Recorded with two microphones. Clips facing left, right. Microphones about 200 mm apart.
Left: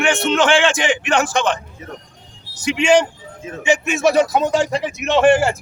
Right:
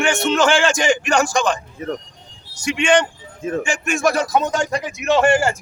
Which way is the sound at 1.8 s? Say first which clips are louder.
Right 9 dB; 55° right (ahead or behind).